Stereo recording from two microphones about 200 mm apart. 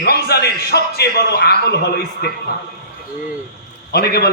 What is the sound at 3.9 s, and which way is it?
Speech, 55° left (ahead or behind).